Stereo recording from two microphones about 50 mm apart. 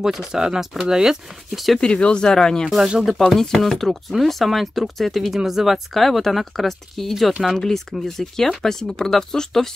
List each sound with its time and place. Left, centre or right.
0.0 s speech: centre
1.8 s speech: centre
2.8 s speech: centre
3.2 s speech: centre